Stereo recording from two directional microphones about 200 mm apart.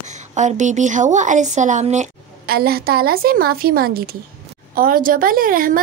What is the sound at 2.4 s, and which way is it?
A woman's voice, 50° right (ahead or behind).